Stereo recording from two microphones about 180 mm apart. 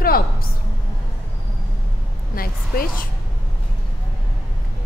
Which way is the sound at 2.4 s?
55° left (ahead or behind).